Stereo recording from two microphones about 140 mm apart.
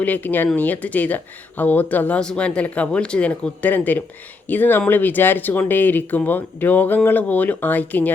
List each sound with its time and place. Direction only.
0.0 s speech: 10° left (ahead or behind)